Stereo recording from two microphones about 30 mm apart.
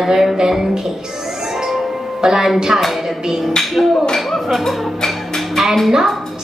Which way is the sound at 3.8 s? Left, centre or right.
Centre.